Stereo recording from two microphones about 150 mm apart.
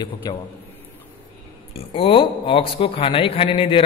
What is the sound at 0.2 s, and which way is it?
Speech, 25° left (ahead or behind).